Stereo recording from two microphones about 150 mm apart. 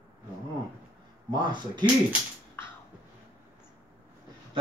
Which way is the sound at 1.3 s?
30° right (ahead or behind).